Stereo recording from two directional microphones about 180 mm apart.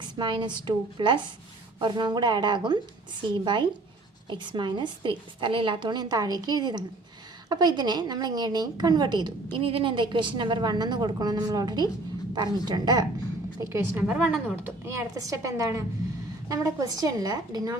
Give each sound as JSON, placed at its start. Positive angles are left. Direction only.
{"t": 0.2, "sound": "a woman's voice", "side_deg": -25}
{"t": 14.8, "sound": "a woman's voice", "side_deg": -15}